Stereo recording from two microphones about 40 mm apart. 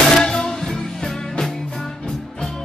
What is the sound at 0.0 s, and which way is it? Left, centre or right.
Music, centre.